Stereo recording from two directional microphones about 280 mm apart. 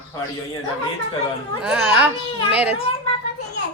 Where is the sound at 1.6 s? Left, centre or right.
Centre.